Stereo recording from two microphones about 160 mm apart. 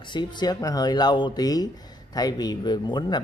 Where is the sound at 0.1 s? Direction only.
25° left (ahead or behind).